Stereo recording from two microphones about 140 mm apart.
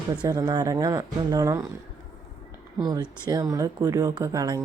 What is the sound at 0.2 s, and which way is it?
Speech, 30° right (ahead or behind).